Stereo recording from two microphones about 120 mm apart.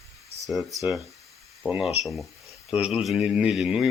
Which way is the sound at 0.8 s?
Centre (ahead or behind).